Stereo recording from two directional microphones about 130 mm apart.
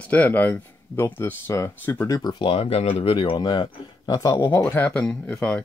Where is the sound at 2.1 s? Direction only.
30° left (ahead or behind).